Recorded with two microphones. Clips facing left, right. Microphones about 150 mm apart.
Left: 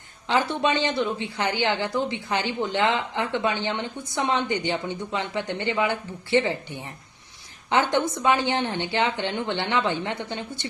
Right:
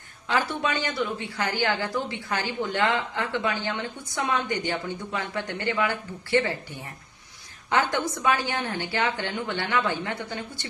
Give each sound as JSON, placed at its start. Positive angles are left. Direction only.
{"t": 0.3, "sound": "a woman's voice", "side_deg": 25}